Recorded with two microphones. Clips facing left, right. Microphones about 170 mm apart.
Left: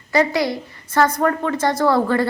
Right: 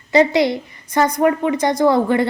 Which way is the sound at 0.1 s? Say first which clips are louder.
Right 4 dB; 20° right (ahead or behind).